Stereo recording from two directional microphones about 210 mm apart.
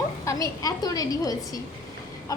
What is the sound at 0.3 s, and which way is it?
A woman's voice, 15° left (ahead or behind).